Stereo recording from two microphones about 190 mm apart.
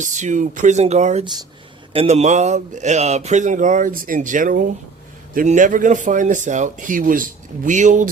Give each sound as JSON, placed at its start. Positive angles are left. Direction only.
{"t": 0.0, "sound": "speech", "side_deg": -40}